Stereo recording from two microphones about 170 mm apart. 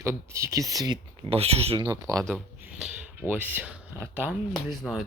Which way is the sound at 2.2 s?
Centre (ahead or behind).